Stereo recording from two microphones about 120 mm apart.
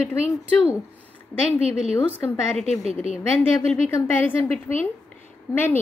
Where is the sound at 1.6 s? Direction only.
60° right (ahead or behind).